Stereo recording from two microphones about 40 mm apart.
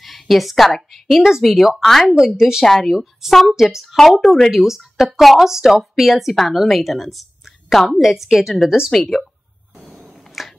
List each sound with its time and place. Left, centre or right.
0.0 s a sound: centre
0.9 s a woman's voice: centre
2.1 s speech: centre
2.6 s a woman's voice: centre
3.5 s a woman's voice: centre
3.9 s a woman's voice: centre
8.9 s a woman's voice: centre
9.8 s a sound: centre
10.4 s finger snapping: centre